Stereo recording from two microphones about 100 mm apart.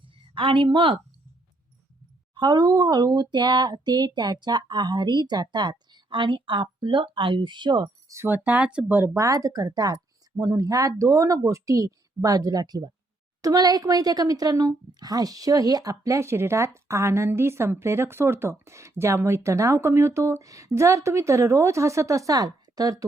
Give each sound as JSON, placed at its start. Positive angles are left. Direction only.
{"t": 0.3, "sound": "speech", "side_deg": -60}
{"t": 2.3, "sound": "a sound", "side_deg": -50}
{"t": 5.9, "sound": "speech", "side_deg": -55}
{"t": 8.0, "sound": "a sound", "side_deg": -30}
{"t": 8.3, "sound": "speech", "side_deg": -15}
{"t": 9.1, "sound": "speech", "side_deg": -35}